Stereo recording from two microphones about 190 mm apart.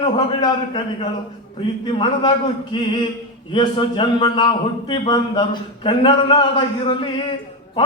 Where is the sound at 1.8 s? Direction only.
25° left (ahead or behind).